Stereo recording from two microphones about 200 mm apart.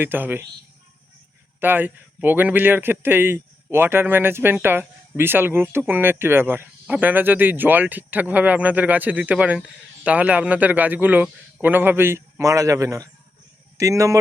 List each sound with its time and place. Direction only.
0.0 s speech: 10° right (ahead or behind)
1.5 s speech: 10° right (ahead or behind)